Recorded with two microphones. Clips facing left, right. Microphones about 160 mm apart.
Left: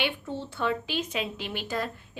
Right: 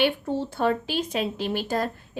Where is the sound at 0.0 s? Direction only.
40° right (ahead or behind).